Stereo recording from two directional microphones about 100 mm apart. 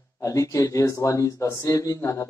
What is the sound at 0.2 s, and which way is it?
A man's voice, 35° left (ahead or behind).